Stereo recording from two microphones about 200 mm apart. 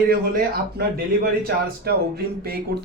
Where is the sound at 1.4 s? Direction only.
50° right (ahead or behind).